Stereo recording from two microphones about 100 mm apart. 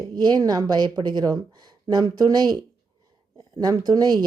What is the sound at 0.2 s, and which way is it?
Speech, 45° right (ahead or behind).